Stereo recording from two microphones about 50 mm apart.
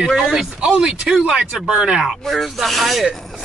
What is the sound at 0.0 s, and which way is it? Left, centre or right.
Speech, centre.